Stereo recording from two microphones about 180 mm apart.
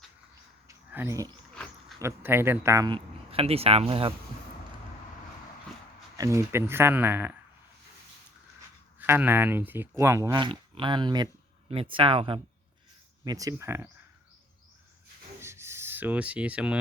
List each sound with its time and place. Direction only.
0.7 s a sound: 10° right (ahead or behind)
2.0 s speech: 15° right (ahead or behind); by 4.1 s 30° right (ahead or behind)
6.1 s speech: 15° right (ahead or behind)
9.0 s speech: 10° right (ahead or behind)
10.3 s speech: 25° right (ahead or behind)
13.2 s speech: 20° right (ahead or behind)
15.4 s a sound: 15° right (ahead or behind)